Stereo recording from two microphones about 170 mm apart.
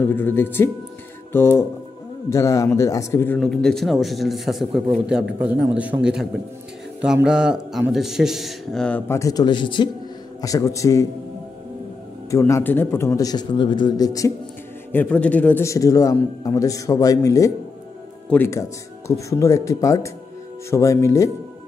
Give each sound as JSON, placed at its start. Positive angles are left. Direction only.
{"t": 0.0, "sound": "a man's voice", "side_deg": 10}
{"t": 3.3, "sound": "speech", "side_deg": 5}
{"t": 7.2, "sound": "a man's voice", "side_deg": -5}
{"t": 12.3, "sound": "a man's voice", "side_deg": 15}
{"t": 14.9, "sound": "a man's voice", "side_deg": 10}